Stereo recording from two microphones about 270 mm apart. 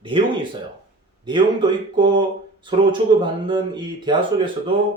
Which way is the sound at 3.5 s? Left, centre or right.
Centre.